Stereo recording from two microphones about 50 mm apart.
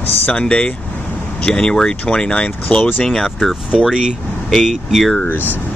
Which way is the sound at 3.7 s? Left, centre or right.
Centre.